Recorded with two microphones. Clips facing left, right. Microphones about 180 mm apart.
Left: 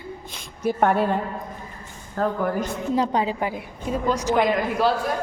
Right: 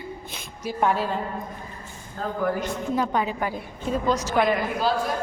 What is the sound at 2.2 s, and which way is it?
Speech, 70° left (ahead or behind).